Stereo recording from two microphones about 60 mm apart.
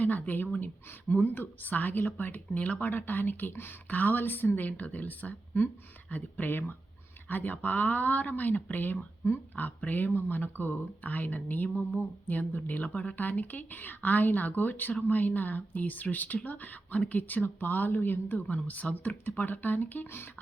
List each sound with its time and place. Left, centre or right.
0.0 s speech: left
3.8 s speech: left